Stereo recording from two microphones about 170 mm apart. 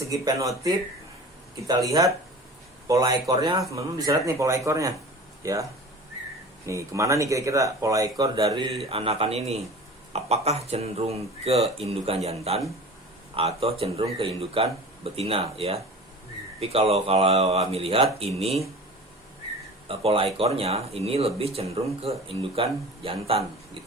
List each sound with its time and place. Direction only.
0.1 s speech: 20° right (ahead or behind)
6.7 s speech: 20° right (ahead or behind)
8.9 s speech: 35° right (ahead or behind)
19.9 s speech: 35° right (ahead or behind)